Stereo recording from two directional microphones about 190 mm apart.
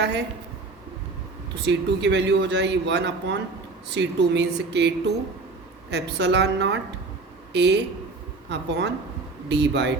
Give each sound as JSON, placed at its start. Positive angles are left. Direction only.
{"t": 0.0, "sound": "a man's voice", "side_deg": -65}
{"t": 1.5, "sound": "a man's voice", "side_deg": -65}